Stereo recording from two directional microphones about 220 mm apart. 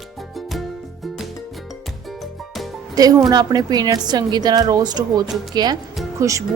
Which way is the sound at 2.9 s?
15° right (ahead or behind).